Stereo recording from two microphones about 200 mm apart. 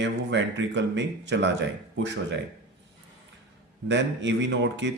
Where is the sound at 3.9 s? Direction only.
65° right (ahead or behind).